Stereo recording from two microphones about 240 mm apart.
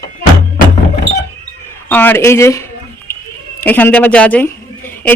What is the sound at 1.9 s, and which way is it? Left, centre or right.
Speech, centre.